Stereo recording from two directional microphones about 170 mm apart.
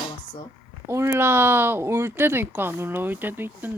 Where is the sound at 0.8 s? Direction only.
15° right (ahead or behind).